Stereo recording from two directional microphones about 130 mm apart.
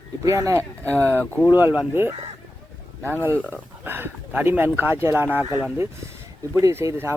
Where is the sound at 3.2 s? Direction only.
15° right (ahead or behind).